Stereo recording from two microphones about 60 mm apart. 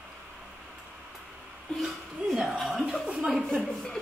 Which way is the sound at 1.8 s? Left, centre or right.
Centre.